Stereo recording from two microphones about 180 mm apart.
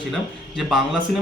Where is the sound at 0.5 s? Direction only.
Centre (ahead or behind).